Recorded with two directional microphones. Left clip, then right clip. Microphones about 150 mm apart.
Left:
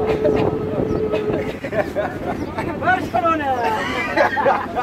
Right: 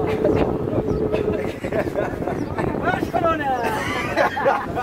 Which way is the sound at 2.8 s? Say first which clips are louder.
Left 4 dB; 20° right (ahead or behind).